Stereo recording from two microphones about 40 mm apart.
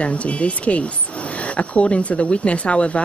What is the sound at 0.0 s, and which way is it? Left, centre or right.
Speech, left.